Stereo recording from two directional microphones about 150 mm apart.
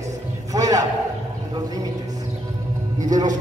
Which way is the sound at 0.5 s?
25° right (ahead or behind).